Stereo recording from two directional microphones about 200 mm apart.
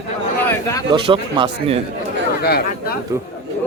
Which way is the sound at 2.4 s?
50° left (ahead or behind).